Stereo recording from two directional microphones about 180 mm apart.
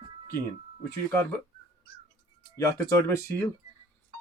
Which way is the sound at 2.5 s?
20° left (ahead or behind).